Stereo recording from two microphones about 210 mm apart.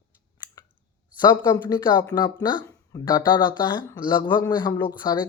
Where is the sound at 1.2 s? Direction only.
20° left (ahead or behind).